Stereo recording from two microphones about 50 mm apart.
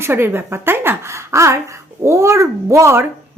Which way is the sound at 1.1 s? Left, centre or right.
Right.